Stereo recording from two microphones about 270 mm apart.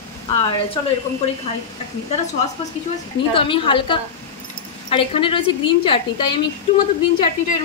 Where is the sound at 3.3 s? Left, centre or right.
Centre.